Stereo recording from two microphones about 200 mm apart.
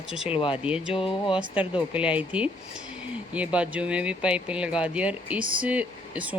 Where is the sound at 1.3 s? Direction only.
5° right (ahead or behind).